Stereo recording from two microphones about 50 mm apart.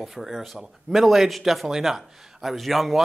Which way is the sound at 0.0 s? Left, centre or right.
Centre.